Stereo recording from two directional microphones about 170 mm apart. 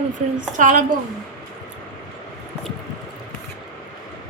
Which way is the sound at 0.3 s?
50° right (ahead or behind).